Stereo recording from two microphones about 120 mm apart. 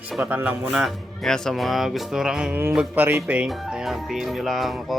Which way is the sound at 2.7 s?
15° right (ahead or behind).